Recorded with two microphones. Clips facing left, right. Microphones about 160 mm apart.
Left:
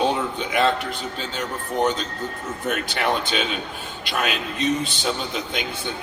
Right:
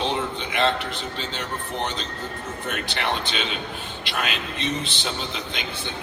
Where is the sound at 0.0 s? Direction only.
45° left (ahead or behind).